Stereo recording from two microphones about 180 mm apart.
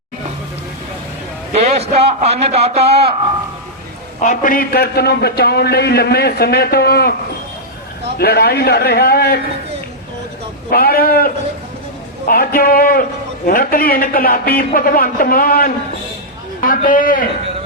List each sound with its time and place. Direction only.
1.5 s a man's voice: 35° right (ahead or behind)
4.2 s a man's voice: 45° left (ahead or behind)
8.2 s a man's voice: 60° left (ahead or behind)
10.7 s a man's voice: 55° left (ahead or behind)